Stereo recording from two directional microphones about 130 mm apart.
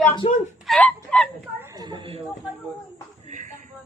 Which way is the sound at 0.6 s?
10° left (ahead or behind).